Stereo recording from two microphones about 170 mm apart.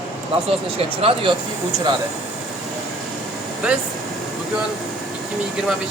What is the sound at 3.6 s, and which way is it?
Speech, 5° right (ahead or behind).